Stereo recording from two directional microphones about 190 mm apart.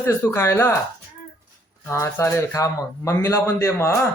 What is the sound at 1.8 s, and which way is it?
A man's voice, 15° left (ahead or behind).